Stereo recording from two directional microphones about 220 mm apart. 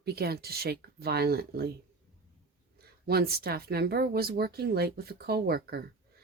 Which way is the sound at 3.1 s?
45° right (ahead or behind).